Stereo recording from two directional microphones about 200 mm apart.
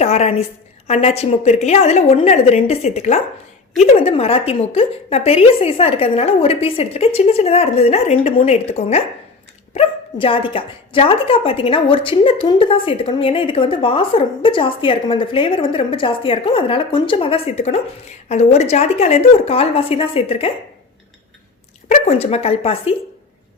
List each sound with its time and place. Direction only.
0.0 s a woman's voice: 35° left (ahead or behind)
21.8 s a woman's voice: 35° left (ahead or behind)